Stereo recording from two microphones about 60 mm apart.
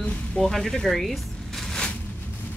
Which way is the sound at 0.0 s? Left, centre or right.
Left.